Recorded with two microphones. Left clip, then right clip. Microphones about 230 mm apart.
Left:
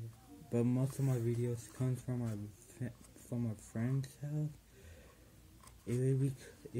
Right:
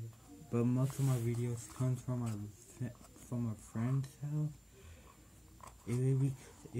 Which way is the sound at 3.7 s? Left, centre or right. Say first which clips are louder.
Even; centre.